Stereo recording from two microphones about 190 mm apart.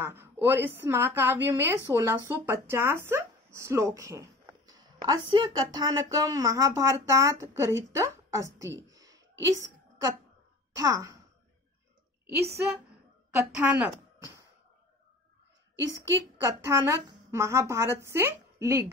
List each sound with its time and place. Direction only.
0.0 s a woman's voice: 10° right (ahead or behind)
9.4 s a sound: 15° right (ahead or behind)
10.8 s a woman's voice: 15° right (ahead or behind)
13.4 s a woman's voice: 5° right (ahead or behind)
16.4 s a woman's voice: 15° right (ahead or behind)